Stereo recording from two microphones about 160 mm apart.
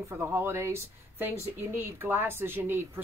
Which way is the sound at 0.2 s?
15° right (ahead or behind).